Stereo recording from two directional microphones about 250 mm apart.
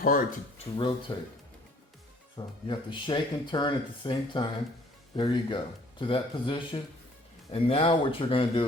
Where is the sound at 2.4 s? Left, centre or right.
Centre.